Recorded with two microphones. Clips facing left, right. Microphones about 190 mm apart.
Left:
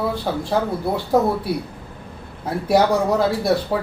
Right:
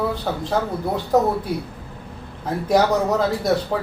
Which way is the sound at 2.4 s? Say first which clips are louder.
Left 1 dB; 10° left (ahead or behind).